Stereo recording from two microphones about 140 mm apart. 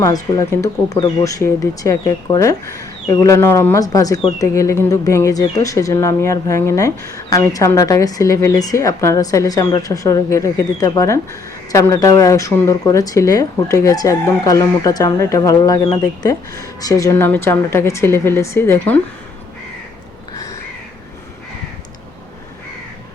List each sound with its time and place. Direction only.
0.0 s speech: 25° left (ahead or behind)